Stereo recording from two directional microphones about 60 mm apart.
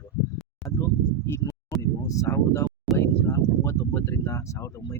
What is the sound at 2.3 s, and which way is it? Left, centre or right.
Speech, left.